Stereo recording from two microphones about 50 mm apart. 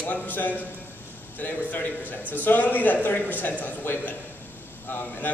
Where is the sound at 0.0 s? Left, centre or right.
Left.